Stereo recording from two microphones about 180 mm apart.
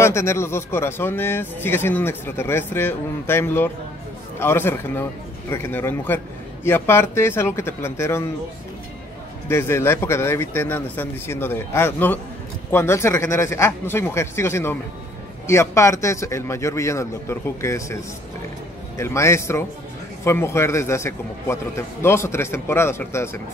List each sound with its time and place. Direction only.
0.0 s speech: 15° left (ahead or behind)
9.5 s speech: 15° left (ahead or behind)